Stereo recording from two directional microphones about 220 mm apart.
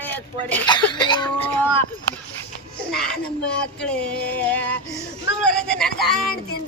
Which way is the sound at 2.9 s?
5° left (ahead or behind).